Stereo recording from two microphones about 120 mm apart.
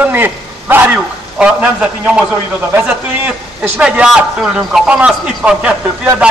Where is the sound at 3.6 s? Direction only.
15° right (ahead or behind).